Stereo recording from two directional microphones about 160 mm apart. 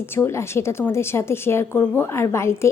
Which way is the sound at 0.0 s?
15° left (ahead or behind).